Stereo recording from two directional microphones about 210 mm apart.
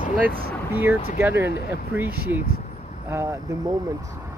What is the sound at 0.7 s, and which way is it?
Speech, 10° right (ahead or behind).